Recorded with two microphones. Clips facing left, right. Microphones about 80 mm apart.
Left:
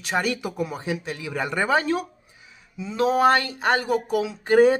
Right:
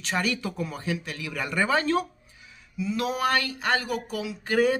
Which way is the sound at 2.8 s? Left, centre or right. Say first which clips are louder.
Left 6 dB; left.